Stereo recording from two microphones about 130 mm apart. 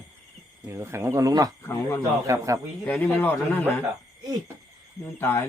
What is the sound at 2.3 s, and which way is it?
Speech, 25° right (ahead or behind).